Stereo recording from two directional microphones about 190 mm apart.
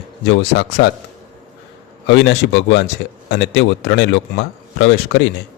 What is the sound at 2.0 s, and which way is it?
A man's voice, 70° left (ahead or behind).